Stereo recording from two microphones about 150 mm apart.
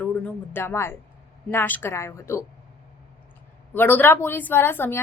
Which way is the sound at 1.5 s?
15° left (ahead or behind).